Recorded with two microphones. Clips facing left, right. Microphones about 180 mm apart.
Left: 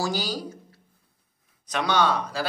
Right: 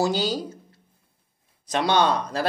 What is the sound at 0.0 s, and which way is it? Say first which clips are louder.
Speech: right 5 dB; 25° right (ahead or behind).